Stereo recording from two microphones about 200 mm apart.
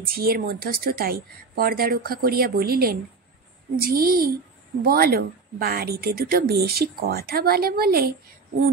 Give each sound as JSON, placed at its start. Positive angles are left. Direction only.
{"t": 0.0, "sound": "a woman's voice", "side_deg": -45}